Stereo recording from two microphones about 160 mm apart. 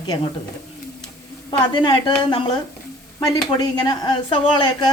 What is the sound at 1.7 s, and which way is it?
Speech, 30° left (ahead or behind).